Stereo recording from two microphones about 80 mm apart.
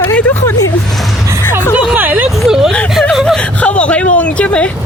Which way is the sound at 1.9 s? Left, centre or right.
Right.